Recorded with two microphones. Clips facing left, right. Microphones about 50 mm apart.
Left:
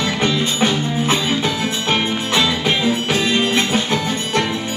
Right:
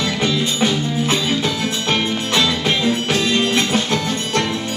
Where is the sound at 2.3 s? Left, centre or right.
Centre.